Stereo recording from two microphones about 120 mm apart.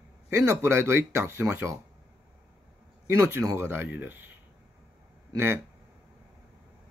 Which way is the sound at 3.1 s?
25° right (ahead or behind).